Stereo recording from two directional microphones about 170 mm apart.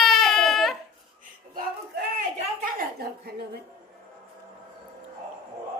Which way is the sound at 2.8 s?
65° right (ahead or behind).